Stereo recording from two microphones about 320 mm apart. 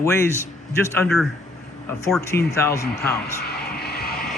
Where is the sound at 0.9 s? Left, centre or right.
Centre.